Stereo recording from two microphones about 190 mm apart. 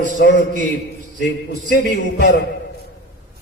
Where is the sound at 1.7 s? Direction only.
60° left (ahead or behind).